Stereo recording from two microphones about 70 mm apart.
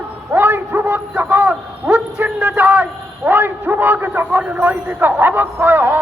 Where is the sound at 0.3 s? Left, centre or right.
Right.